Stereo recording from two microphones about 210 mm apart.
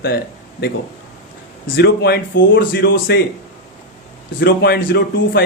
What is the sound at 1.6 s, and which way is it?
A man's voice, 50° left (ahead or behind).